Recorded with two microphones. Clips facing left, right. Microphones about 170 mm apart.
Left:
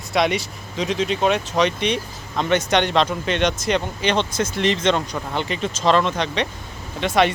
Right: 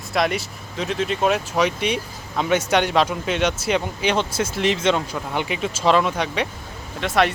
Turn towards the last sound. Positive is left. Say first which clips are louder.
# left 2 dB
turn(degrees=0)  # may be behind; listen again after turning